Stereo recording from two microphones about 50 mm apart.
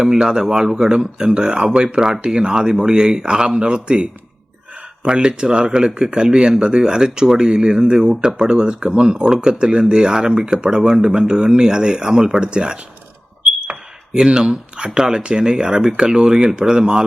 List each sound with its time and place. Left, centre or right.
0.0 s speech: centre
14.1 s speech: centre